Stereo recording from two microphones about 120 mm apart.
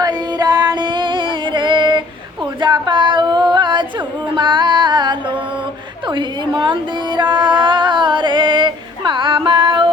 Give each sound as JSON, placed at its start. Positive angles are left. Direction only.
{"t": 0.0, "sound": "music", "side_deg": -35}
{"t": 2.6, "sound": "singing", "side_deg": -40}
{"t": 4.4, "sound": "music", "side_deg": -40}
{"t": 6.1, "sound": "a sound", "side_deg": -40}